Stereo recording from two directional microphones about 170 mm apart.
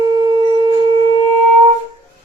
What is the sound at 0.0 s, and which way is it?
Wind instrument, 25° right (ahead or behind).